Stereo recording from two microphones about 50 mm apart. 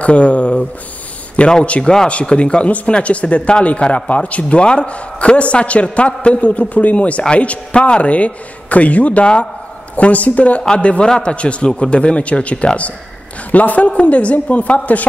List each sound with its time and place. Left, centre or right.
0.0 s speech: left